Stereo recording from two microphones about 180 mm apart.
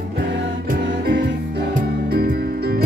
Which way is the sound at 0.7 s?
65° right (ahead or behind).